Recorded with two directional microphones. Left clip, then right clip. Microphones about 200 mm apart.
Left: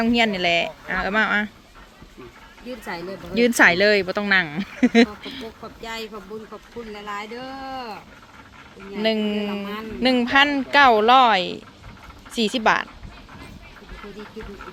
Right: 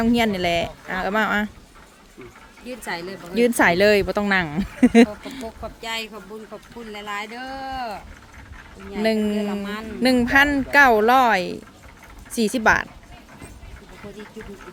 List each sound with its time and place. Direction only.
0.0 s a woman's voice: 15° right (ahead or behind)
2.6 s speech: 20° right (ahead or behind)